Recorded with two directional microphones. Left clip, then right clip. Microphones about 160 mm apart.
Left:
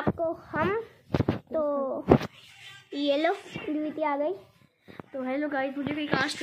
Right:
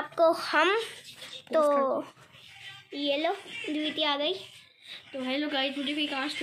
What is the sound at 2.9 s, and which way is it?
Speech, 60° left (ahead or behind).